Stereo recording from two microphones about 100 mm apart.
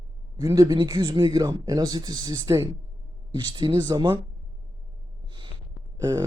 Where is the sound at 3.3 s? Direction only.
50° right (ahead or behind).